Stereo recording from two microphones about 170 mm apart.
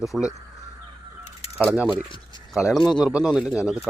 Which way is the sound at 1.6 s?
5° right (ahead or behind).